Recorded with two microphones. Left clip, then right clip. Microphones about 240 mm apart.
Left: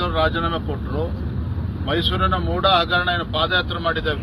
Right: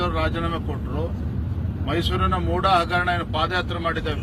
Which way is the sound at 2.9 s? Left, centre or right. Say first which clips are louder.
Left 2 dB; centre.